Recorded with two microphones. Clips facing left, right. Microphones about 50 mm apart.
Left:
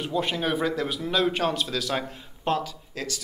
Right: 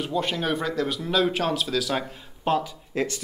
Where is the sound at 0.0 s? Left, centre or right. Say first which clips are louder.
Even; centre.